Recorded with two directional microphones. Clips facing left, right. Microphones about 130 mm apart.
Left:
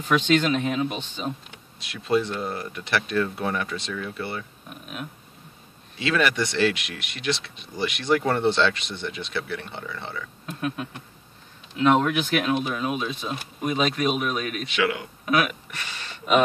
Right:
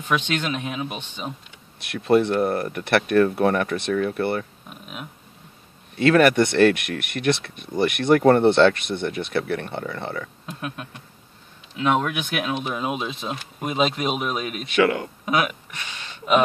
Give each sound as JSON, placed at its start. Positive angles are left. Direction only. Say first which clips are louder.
{"t": 0.1, "sound": "speech", "louder": "left 4 dB", "side_deg": -10}
{"t": 1.8, "sound": "speech", "louder": "right 5 dB", "side_deg": -60}
{"t": 5.9, "sound": "speech", "louder": "right 8 dB", "side_deg": -50}
{"t": 10.4, "sound": "speech", "louder": "left 3 dB", "side_deg": -5}
{"t": 14.7, "sound": "speech", "louder": "right 7 dB", "side_deg": -45}
{"t": 15.2, "sound": "speech", "louder": "even", "side_deg": -20}